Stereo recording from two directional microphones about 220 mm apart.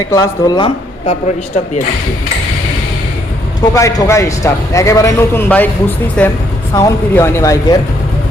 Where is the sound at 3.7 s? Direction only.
15° left (ahead or behind).